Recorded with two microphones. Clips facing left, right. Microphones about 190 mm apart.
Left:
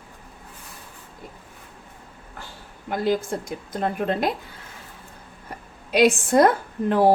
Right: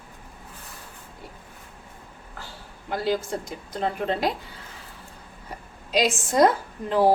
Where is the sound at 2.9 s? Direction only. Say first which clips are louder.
Left 2 dB; 50° left (ahead or behind).